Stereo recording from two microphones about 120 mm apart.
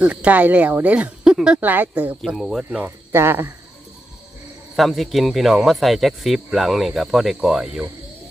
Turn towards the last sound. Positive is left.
turn(degrees=-5)  # may be behind; listen again after turning